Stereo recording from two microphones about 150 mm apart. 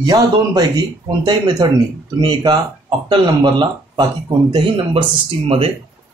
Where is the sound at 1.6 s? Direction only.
30° right (ahead or behind).